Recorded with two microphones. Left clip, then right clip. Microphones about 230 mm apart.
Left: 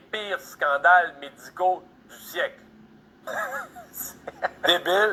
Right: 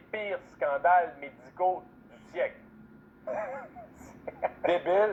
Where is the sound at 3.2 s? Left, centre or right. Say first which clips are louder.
Left 5 dB; left.